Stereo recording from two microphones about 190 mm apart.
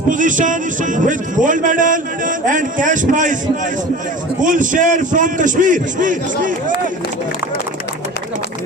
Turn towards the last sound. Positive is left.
turn(degrees=-45)  # may be behind; listen again after turning